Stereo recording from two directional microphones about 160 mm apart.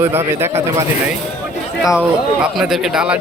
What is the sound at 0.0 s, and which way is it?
Speech, 15° right (ahead or behind).